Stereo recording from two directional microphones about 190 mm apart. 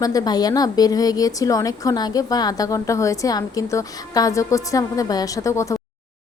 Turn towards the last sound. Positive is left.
turn(degrees=15)  # may be behind; listen again after turning